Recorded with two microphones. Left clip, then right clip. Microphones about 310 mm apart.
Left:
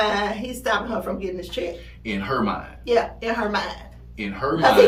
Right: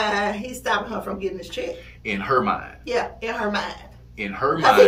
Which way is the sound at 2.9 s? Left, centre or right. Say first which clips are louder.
Left 4 dB; centre.